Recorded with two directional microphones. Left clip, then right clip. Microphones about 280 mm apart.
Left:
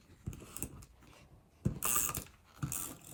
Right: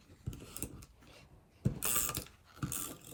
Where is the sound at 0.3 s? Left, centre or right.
Centre.